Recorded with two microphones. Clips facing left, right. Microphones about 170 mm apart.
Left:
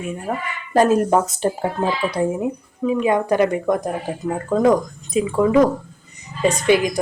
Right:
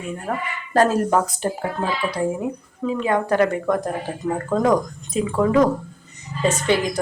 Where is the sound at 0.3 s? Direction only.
15° left (ahead or behind).